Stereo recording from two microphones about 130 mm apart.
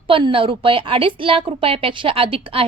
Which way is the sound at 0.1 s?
40° right (ahead or behind).